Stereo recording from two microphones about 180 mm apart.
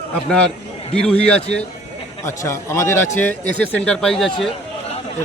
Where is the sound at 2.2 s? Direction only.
15° left (ahead or behind).